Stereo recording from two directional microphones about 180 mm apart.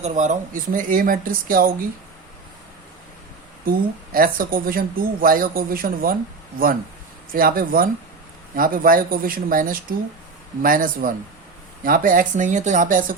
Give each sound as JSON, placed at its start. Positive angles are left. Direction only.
{"t": 0.0, "sound": "speech", "side_deg": -40}
{"t": 3.7, "sound": "speech", "side_deg": -50}
{"t": 7.3, "sound": "speech", "side_deg": -55}